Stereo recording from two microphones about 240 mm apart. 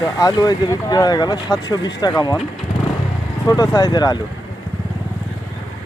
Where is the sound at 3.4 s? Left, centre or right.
Centre.